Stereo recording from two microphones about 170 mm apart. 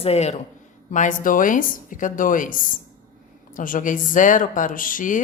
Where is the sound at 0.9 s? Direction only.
50° left (ahead or behind).